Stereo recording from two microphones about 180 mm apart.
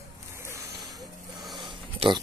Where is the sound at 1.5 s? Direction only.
25° right (ahead or behind).